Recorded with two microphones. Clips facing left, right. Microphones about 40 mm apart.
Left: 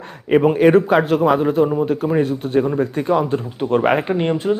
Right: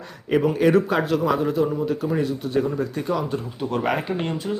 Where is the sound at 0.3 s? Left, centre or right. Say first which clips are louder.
Left 6 dB; left.